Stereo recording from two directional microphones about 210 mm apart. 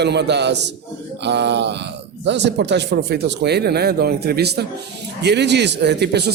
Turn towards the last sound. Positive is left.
turn(degrees=-50)  # may be behind; listen again after turning